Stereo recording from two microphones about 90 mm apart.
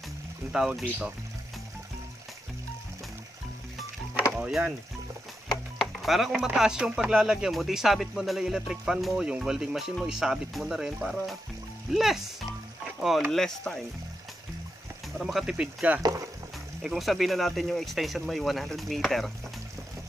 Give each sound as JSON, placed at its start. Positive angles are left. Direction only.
{"t": 0.5, "sound": "speech", "side_deg": -10}
{"t": 4.4, "sound": "speech", "side_deg": -5}
{"t": 5.8, "sound": "speech", "side_deg": 0}
{"t": 13.3, "sound": "speech", "side_deg": 5}
{"t": 15.1, "sound": "speech", "side_deg": -5}
{"t": 16.0, "sound": "speech", "side_deg": -40}
{"t": 16.8, "sound": "speech", "side_deg": 0}